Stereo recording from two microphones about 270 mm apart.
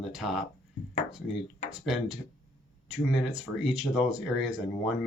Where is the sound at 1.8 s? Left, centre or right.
Centre.